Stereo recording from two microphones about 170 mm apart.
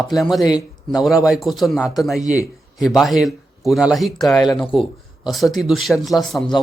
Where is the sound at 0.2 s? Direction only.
Centre (ahead or behind).